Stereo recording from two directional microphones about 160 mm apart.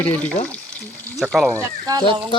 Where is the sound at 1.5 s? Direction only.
20° right (ahead or behind).